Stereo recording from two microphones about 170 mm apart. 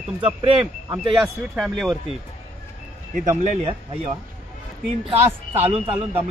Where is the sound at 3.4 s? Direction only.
40° right (ahead or behind).